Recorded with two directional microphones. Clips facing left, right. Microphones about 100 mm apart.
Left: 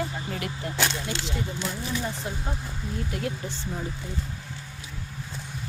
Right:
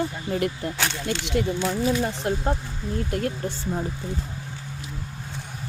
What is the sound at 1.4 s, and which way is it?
Speech, 70° right (ahead or behind).